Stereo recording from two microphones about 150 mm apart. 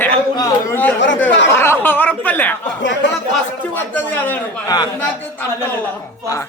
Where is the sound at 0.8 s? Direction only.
10° left (ahead or behind).